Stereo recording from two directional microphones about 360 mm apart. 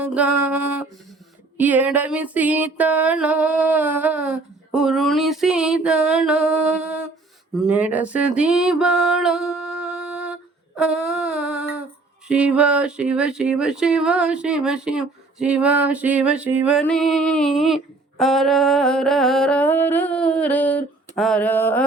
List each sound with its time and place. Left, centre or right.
0.0 s music: centre
1.5 s speech: centre
7.7 s music: centre
12.3 s speech: centre